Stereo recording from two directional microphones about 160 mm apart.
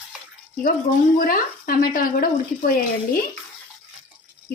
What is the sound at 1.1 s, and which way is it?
Speech, 65° left (ahead or behind).